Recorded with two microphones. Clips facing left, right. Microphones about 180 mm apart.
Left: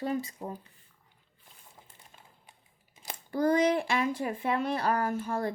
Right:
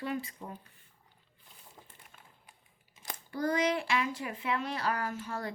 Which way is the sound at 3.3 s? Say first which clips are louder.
Left 5 dB; 50° left (ahead or behind).